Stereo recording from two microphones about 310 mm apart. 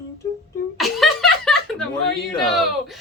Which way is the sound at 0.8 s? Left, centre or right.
Centre.